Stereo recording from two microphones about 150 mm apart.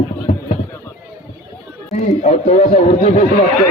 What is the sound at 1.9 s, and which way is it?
Speech, 45° left (ahead or behind).